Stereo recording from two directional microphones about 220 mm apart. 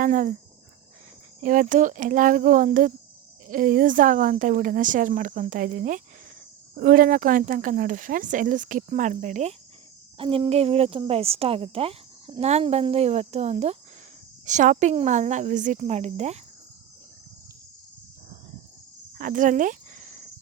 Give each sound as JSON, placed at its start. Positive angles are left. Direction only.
{"t": 0.0, "sound": "speech", "side_deg": -35}
{"t": 1.4, "sound": "speech", "side_deg": -35}
{"t": 19.1, "sound": "a sound", "side_deg": -35}